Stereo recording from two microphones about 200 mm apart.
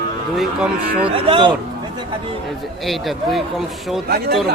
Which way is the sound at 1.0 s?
25° right (ahead or behind).